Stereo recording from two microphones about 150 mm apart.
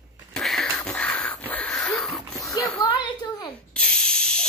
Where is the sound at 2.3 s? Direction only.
25° left (ahead or behind).